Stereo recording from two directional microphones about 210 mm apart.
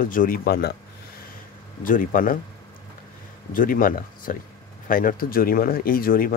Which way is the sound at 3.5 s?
40° left (ahead or behind).